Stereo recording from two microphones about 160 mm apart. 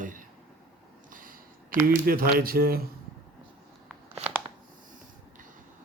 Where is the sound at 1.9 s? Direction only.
65° right (ahead or behind).